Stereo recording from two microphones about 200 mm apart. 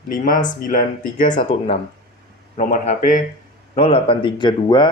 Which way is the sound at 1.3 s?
30° left (ahead or behind).